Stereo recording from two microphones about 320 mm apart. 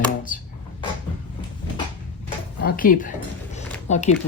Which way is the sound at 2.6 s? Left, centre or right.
Left.